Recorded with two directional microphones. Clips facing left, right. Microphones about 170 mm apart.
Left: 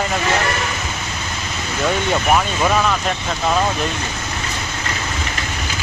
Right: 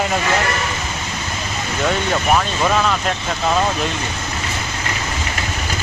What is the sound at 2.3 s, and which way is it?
Speech, 5° left (ahead or behind).